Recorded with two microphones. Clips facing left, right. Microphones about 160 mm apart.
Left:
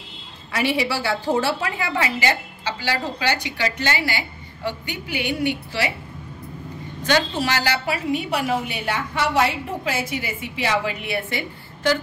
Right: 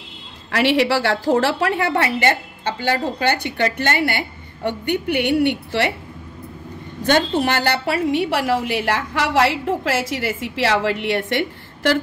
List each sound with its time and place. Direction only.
0.5 s a woman's voice: 75° right (ahead or behind)
7.1 s a woman's voice: 55° right (ahead or behind); by 11.3 s 85° right